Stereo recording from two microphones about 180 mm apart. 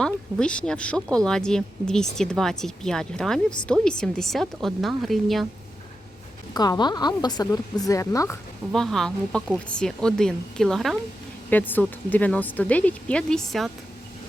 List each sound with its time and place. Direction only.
0.0 s speech: 5° left (ahead or behind)
6.5 s speech: 20° left (ahead or behind)
8.7 s speech: centre (ahead or behind)